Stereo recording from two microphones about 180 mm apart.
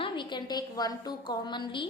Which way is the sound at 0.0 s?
25° left (ahead or behind).